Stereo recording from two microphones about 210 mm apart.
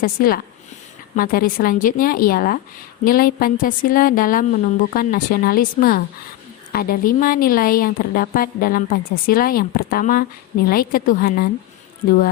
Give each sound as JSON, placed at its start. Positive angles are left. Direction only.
{"t": 0.0, "sound": "a woman's voice", "side_deg": 45}